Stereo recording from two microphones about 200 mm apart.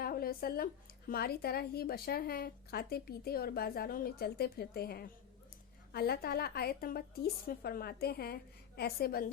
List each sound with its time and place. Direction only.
0.0 s a woman's voice: 50° left (ahead or behind)